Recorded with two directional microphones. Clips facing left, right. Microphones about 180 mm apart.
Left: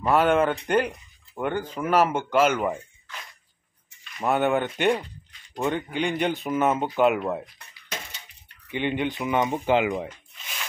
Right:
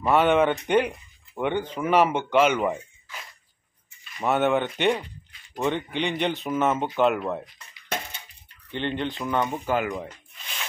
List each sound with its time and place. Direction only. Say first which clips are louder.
0.0 s speech: right 1 dB; centre (ahead or behind)
7.9 s a sound: right 6 dB; 55° right (ahead or behind)
8.6 s speech: left 2 dB; 10° left (ahead or behind)